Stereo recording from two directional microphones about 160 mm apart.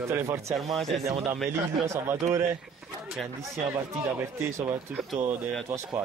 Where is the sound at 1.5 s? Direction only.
15° right (ahead or behind).